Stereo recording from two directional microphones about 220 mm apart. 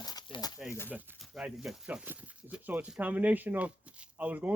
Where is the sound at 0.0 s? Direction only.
15° left (ahead or behind).